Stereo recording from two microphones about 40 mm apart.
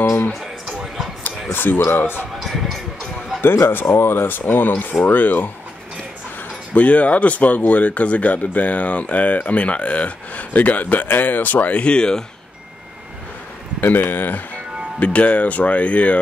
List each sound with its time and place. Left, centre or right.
1.2 s speech: left
2.4 s speech: centre
3.3 s speech: left
6.7 s speech: left
11.8 s speech: left
13.7 s speech: left
15.0 s speech: left